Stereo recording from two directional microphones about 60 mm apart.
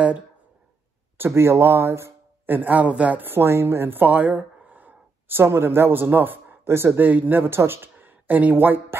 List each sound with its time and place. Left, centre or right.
1.1 s speech: right
2.4 s speech: right
4.0 s a sound: right
5.4 s speech: right